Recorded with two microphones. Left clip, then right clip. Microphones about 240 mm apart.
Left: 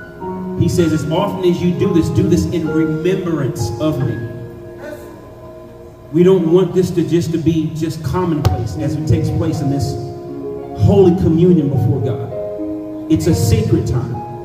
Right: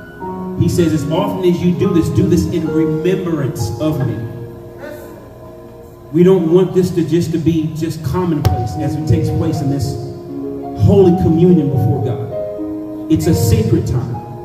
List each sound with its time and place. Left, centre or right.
0.6 s speech: centre
6.1 s speech: centre